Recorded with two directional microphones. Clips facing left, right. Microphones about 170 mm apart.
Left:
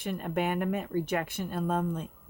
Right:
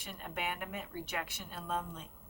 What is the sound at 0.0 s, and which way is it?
Speech, 55° left (ahead or behind).